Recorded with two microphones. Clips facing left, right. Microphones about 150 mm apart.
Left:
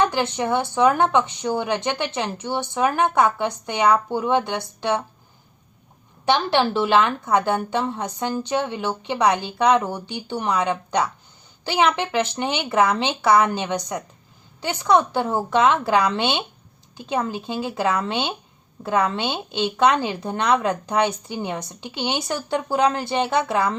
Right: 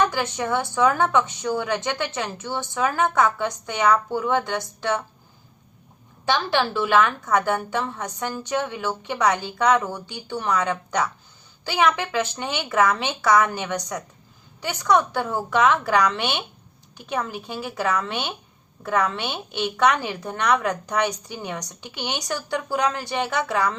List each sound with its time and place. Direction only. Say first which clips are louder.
0.0 s a woman's voice: left 2 dB; 20° left (ahead or behind)
6.2 s a woman's voice: left 3 dB; 20° left (ahead or behind)